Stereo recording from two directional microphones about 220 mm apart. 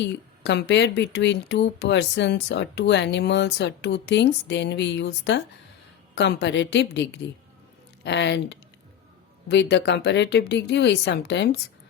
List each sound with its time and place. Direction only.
0.0 s speech: 50° left (ahead or behind)